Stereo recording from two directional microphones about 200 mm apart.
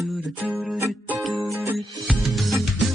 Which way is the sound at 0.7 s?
15° right (ahead or behind).